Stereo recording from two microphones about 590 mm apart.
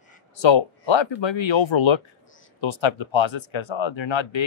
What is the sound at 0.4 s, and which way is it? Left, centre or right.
Speech, left.